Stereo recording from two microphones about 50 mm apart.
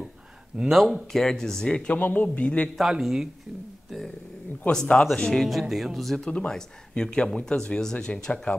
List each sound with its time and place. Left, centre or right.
0.6 s speech: centre
1.1 s speech: centre
2.0 s a man's voice: left
3.0 s speech: centre
4.6 s speech: centre
6.1 s speech: centre